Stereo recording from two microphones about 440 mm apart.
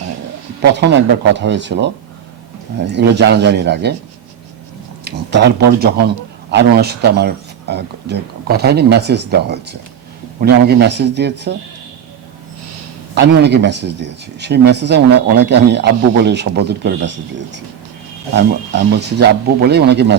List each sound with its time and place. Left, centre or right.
0.6 s speech: right
5.0 s speech: right
13.1 s speech: right
18.3 s speech: right